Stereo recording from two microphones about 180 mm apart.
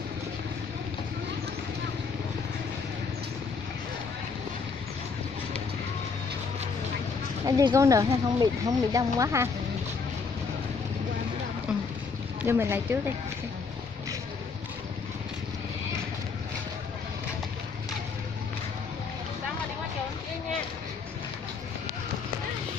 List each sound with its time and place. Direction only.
7.4 s speech: 20° right (ahead or behind)
12.4 s speech: 15° right (ahead or behind)